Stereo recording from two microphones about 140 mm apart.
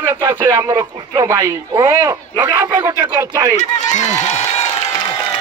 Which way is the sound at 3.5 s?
55° left (ahead or behind).